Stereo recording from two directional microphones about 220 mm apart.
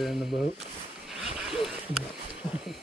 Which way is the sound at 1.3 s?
Centre (ahead or behind).